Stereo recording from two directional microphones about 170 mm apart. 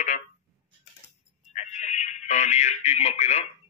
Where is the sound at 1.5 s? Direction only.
45° left (ahead or behind).